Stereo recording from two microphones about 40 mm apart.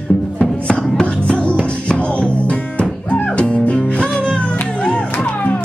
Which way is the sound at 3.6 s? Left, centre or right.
Centre.